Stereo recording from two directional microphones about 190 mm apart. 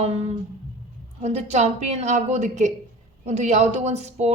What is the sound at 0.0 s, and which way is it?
A woman's voice, 35° right (ahead or behind).